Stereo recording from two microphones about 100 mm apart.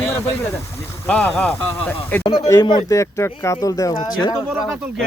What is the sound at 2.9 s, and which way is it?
Speech, 30° left (ahead or behind).